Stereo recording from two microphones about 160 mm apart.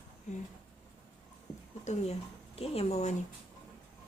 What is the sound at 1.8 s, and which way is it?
Speech, 45° left (ahead or behind).